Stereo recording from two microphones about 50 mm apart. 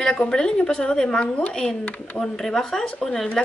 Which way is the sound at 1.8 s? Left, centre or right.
Left.